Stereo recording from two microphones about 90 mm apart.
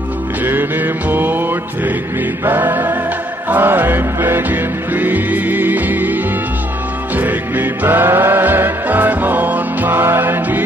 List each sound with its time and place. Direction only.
0.5 s mantra: 20° right (ahead or behind)
2.4 s music: 25° right (ahead or behind)
7.2 s music: 20° right (ahead or behind)